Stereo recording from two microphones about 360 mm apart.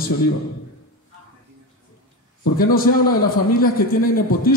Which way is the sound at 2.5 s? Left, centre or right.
Left.